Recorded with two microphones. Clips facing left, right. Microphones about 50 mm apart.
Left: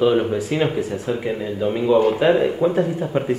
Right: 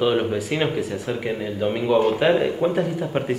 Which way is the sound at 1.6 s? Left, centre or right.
Right.